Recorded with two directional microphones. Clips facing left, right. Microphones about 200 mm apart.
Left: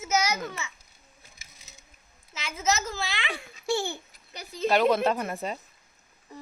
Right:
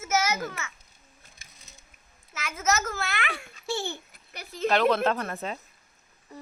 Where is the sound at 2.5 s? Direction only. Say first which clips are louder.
Right 1 dB; 15° left (ahead or behind).